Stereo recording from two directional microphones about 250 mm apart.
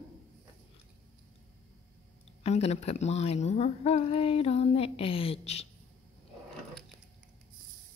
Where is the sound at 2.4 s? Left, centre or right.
Left.